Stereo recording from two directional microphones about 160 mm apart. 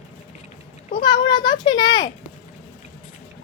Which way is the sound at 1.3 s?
25° left (ahead or behind).